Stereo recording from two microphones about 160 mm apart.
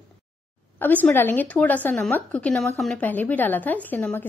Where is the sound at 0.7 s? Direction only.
10° left (ahead or behind).